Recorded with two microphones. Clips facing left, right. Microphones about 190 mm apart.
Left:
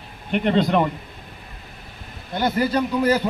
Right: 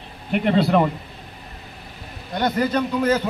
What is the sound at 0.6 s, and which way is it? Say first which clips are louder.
Speech: right 1 dB; 5° right (ahead or behind).